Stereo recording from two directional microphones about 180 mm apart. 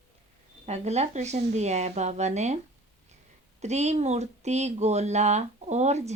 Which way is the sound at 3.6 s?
40° right (ahead or behind).